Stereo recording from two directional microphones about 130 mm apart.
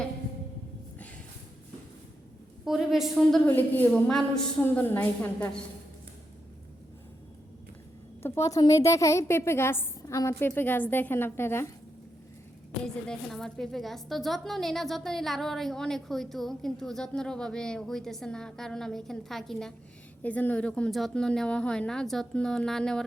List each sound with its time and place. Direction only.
2.6 s a woman's voice: centre (ahead or behind)
3.4 s a woman's voice: 15° left (ahead or behind)
8.2 s a woman's voice: 25° left (ahead or behind)
12.8 s a woman's voice: 5° left (ahead or behind)